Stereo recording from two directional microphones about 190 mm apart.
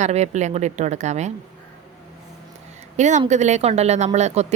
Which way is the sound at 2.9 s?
40° right (ahead or behind).